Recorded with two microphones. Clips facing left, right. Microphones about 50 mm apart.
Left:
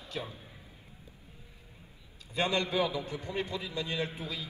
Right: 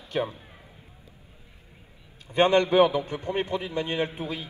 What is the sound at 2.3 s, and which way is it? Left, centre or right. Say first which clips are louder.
A man's voice: right 10 dB; right.